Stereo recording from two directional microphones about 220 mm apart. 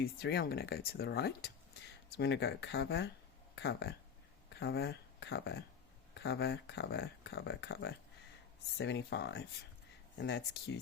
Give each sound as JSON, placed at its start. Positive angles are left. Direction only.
{"t": 0.0, "sound": "speech", "side_deg": 45}